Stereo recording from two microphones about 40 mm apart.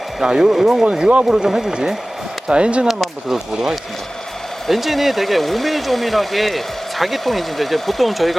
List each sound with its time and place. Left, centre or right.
0.2 s speech: centre
1.5 s speech: centre
2.5 s speech: right
3.2 s speech: centre